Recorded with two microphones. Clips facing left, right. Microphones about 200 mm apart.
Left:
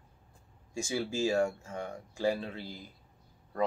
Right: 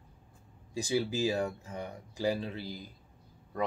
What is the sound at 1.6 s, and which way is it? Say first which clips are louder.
Speech: left 1 dB; 15° right (ahead or behind).